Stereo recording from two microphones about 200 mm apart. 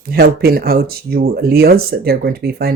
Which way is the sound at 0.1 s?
50° right (ahead or behind).